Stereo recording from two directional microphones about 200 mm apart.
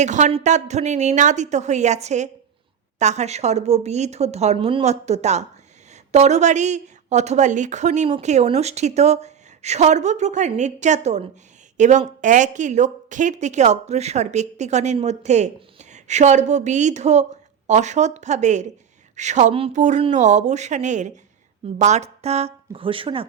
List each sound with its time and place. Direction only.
0.0 s speech: 35° right (ahead or behind)